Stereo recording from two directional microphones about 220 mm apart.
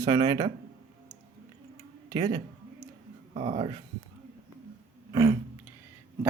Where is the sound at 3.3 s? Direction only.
30° right (ahead or behind).